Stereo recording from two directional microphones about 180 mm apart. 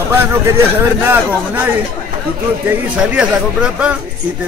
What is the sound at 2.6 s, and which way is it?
Speech, 5° right (ahead or behind).